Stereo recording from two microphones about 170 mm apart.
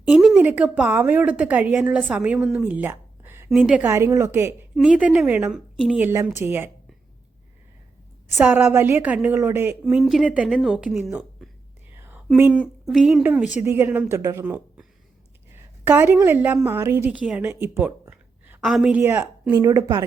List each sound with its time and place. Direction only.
0.0 s a sound: centre (ahead or behind)
0.5 s a woman's voice: 5° right (ahead or behind)
6.1 s a woman's voice: 15° right (ahead or behind)
8.4 s a woman's voice: 10° right (ahead or behind)
9.8 s speech: centre (ahead or behind)
11.9 s whispering: 10° right (ahead or behind)
12.4 s a woman's voice: 5° right (ahead or behind)
15.8 s a woman's voice: 10° right (ahead or behind)